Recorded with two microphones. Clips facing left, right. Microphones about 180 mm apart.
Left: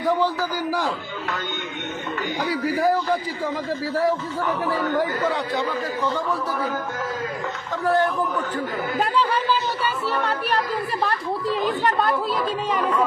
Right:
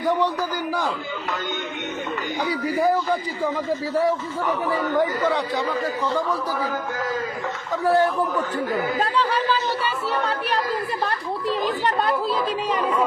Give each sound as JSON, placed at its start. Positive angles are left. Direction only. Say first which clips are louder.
{"t": 0.0, "sound": "a man's voice", "louder": "even", "side_deg": 0}
{"t": 2.4, "sound": "a man's voice", "louder": "even", "side_deg": 0}
{"t": 7.9, "sound": "a man's voice", "louder": "right 1 dB", "side_deg": -10}
{"t": 10.1, "sound": "a man's voice", "louder": "even", "side_deg": 0}